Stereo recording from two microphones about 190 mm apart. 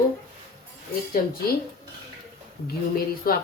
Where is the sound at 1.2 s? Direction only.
45° left (ahead or behind).